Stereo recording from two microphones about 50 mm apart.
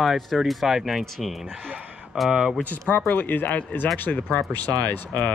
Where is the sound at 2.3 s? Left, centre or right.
Centre.